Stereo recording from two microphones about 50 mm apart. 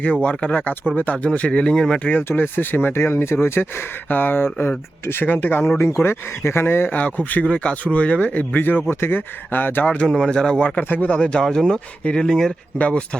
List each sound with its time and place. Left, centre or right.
0.0 s speech: left
2.2 s speech: left
2.9 s speech: left
5.2 s speech: left
6.9 s speech: left
7.4 s speech: left
9.8 s speech: left
10.8 s speech: left
11.2 s speech: left
12.8 s speech: left